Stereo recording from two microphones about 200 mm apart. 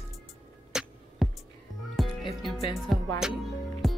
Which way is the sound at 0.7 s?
5° right (ahead or behind).